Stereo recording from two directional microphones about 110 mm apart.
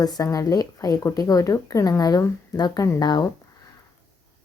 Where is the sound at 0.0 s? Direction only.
35° left (ahead or behind).